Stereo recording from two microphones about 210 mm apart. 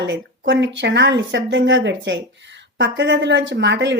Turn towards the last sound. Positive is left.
turn(degrees=-55)  # may be behind; listen again after turning